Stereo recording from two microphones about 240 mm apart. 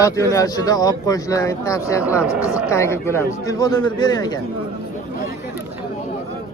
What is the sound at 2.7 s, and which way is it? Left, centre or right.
Speech, centre.